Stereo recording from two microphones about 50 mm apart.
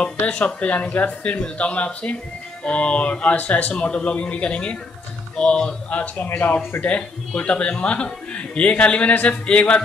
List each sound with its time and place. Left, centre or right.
0.6 s speech: left
6.3 s speech: left
6.9 s speech: left